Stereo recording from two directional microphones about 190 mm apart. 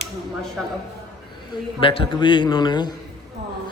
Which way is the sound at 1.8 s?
25° left (ahead or behind).